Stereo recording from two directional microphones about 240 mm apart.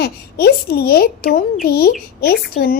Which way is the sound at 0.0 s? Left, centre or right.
Left.